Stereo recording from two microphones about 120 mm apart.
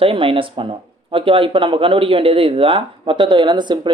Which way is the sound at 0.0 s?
50° right (ahead or behind).